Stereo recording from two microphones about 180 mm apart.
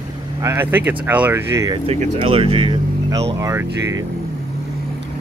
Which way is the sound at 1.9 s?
35° right (ahead or behind).